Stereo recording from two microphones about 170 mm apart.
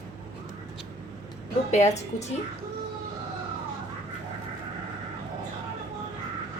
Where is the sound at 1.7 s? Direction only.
40° left (ahead or behind).